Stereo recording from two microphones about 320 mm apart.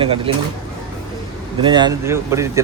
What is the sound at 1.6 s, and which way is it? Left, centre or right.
Speech, centre.